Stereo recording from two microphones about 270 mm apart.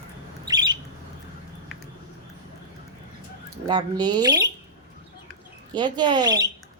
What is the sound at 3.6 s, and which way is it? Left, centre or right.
Speech, centre.